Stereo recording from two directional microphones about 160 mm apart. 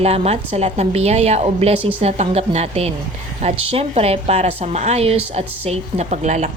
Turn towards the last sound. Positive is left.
turn(degrees=-50)  # may be behind; listen again after turning